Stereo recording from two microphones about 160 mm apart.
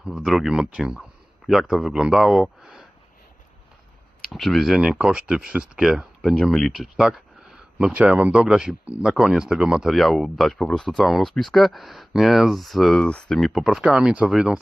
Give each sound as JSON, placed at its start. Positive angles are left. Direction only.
{"t": 0.2, "sound": "speech", "side_deg": 0}
{"t": 4.3, "sound": "speech", "side_deg": 0}